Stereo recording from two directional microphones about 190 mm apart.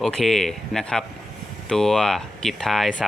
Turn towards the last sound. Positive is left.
turn(degrees=0)  # may be behind; listen again after turning